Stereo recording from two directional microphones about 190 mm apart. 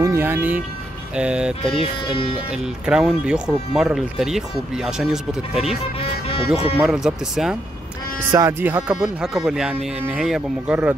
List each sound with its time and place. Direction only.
0.0 s speech: 15° right (ahead or behind)
1.7 s speech: 30° left (ahead or behind)
2.9 s speech: 5° right (ahead or behind)
5.9 s speech: 30° left (ahead or behind)
6.8 s speech: 5° right (ahead or behind)
8.2 s speech: 15° right (ahead or behind)